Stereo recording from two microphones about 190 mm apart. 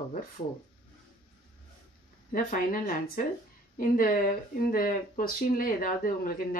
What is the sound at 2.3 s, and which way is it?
Speech, 50° left (ahead or behind).